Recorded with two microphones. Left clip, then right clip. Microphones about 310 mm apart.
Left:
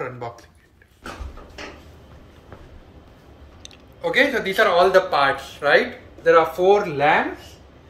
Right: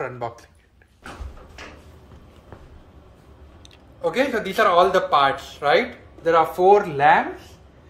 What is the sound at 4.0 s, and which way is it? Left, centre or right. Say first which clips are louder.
Speech: left 3 dB; right.